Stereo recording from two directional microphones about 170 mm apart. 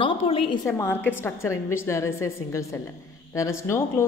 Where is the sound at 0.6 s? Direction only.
15° left (ahead or behind).